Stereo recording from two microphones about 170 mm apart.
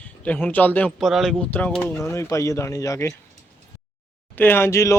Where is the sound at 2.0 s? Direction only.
15° left (ahead or behind).